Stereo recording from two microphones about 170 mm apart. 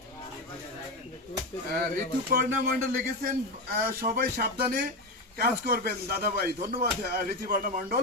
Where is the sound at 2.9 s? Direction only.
60° right (ahead or behind).